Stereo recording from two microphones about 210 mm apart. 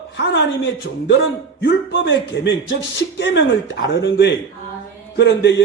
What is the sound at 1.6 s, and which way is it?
Speech, 60° left (ahead or behind).